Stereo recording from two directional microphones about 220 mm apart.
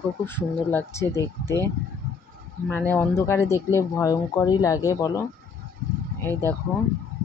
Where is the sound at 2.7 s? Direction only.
10° left (ahead or behind).